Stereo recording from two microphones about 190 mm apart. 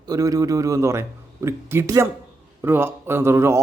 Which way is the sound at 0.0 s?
20° right (ahead or behind).